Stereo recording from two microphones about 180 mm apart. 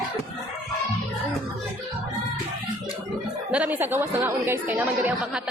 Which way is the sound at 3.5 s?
10° right (ahead or behind).